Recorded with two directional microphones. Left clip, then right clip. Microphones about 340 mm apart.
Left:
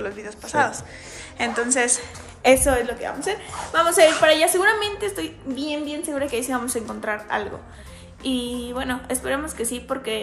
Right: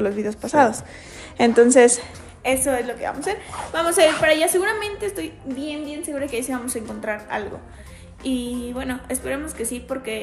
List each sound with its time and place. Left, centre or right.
0.0 s a woman's voice: centre
2.6 s a woman's voice: centre